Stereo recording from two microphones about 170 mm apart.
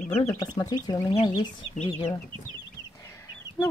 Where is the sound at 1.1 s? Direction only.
35° left (ahead or behind).